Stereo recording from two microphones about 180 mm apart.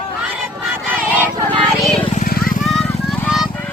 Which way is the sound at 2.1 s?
50° left (ahead or behind).